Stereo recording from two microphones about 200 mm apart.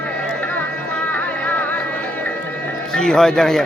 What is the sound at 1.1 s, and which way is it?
Music, 10° left (ahead or behind).